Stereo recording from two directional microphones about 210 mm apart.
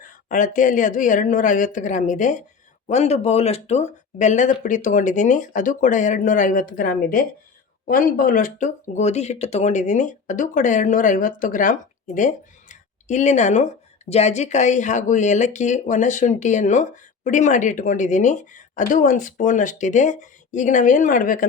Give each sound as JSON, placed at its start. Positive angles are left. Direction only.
{"t": 0.3, "sound": "speech", "side_deg": 40}